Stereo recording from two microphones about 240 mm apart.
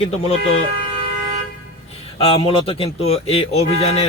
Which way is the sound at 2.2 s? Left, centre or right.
Left.